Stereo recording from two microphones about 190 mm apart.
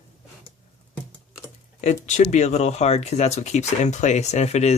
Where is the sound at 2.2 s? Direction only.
40° left (ahead or behind).